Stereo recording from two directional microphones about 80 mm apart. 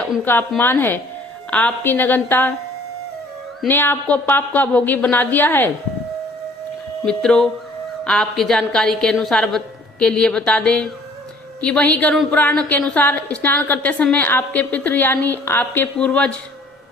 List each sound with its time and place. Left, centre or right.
0.3 s a woman's voice: left
1.5 s a woman's voice: centre
3.7 s a woman's voice: left
7.0 s a woman's voice: centre; by 15.9 s left
16.0 s a woman's voice: centre